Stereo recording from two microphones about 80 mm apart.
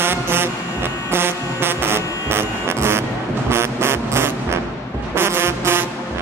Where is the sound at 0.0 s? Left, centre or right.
Right.